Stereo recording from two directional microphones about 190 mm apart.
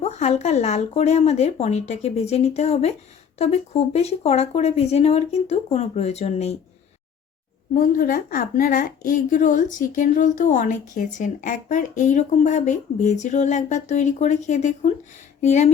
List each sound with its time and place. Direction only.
0.0 s speech: 35° left (ahead or behind)
7.7 s a woman's voice: 45° left (ahead or behind)